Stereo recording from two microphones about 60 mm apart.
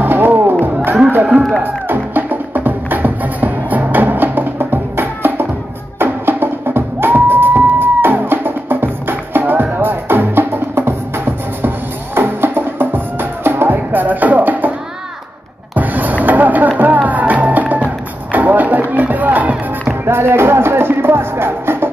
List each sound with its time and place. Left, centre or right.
0.0 s music: right
1.6 s music: right
15.7 s music: right
20.1 s music: right